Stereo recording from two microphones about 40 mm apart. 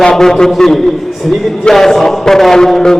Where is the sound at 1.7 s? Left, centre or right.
Centre.